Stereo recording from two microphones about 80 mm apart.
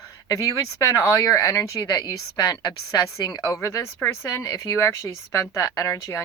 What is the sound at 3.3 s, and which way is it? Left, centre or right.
Speech, left.